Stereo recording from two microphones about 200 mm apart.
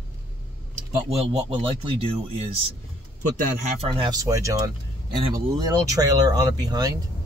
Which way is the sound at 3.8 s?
25° right (ahead or behind).